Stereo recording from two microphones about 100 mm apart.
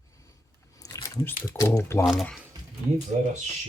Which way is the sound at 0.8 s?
35° left (ahead or behind).